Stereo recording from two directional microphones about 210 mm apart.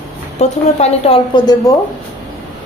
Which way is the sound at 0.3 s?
30° left (ahead or behind).